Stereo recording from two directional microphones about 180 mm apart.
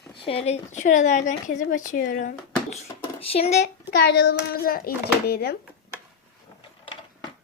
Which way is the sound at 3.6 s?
75° left (ahead or behind).